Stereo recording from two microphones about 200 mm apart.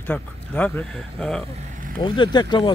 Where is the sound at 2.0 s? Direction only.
20° left (ahead or behind).